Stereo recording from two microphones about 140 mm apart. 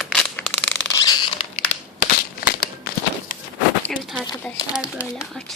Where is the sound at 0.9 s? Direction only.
30° left (ahead or behind).